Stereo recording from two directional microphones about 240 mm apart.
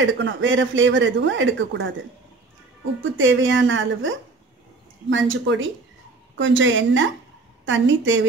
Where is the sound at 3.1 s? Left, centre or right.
Right.